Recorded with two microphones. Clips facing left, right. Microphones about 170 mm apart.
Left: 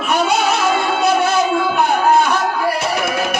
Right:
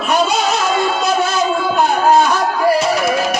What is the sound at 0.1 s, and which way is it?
Music, 60° left (ahead or behind).